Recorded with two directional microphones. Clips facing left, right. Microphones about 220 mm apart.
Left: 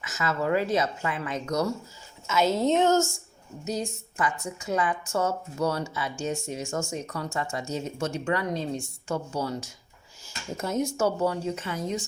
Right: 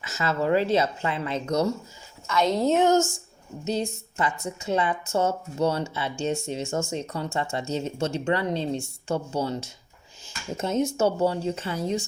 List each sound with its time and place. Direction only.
0.0 s a woman's voice: 30° right (ahead or behind)
2.2 s a woman's voice: 5° left (ahead or behind)
2.8 s speech: 15° right (ahead or behind)
3.6 s a woman's voice: 25° right (ahead or behind)